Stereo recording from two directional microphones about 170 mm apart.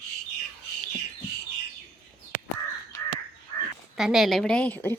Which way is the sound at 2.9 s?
15° left (ahead or behind).